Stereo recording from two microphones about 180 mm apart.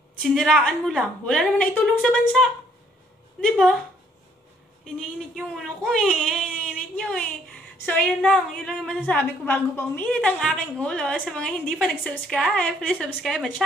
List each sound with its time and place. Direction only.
0.2 s a woman's voice: centre (ahead or behind)
4.8 s a woman's voice: centre (ahead or behind)